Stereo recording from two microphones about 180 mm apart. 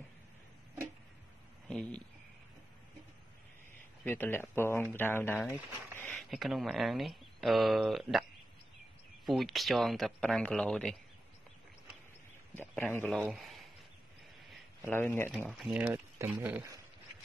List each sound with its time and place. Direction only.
1.7 s speech: 5° left (ahead or behind)
4.0 s speech: 10° left (ahead or behind)
5.9 s a sound: 10° left (ahead or behind)
6.3 s speech: centre (ahead or behind)
12.5 s speech: 10° left (ahead or behind)
13.3 s a sound: centre (ahead or behind)
14.9 s speech: 10° left (ahead or behind)
15.3 s speech: 5° right (ahead or behind)